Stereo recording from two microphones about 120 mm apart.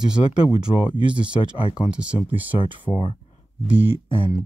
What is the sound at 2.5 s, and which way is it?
Speech, 45° left (ahead or behind).